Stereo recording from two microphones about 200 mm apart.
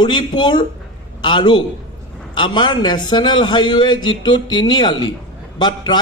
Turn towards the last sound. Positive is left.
turn(degrees=20)  # may be behind; listen again after turning